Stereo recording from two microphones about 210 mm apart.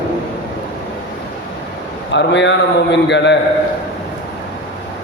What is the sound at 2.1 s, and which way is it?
A man's voice, 60° left (ahead or behind).